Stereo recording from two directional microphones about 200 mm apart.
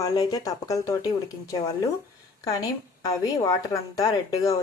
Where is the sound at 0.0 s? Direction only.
20° left (ahead or behind).